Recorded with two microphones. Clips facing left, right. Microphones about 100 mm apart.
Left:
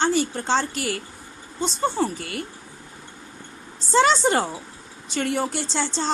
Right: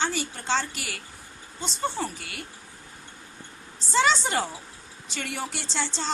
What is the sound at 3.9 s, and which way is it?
A woman's voice, 40° left (ahead or behind).